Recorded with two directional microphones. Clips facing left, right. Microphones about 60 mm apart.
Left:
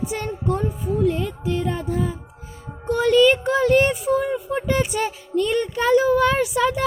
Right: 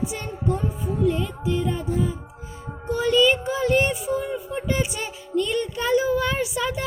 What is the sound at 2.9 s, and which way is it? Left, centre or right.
Child singing, left.